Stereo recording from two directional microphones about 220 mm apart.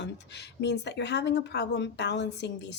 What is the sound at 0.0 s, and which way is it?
Speech, 50° left (ahead or behind).